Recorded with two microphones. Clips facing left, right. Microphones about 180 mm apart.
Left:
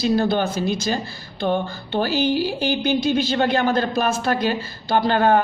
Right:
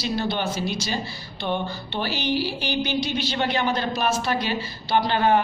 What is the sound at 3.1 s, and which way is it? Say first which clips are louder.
A man's voice: left 6 dB; 50° left (ahead or behind).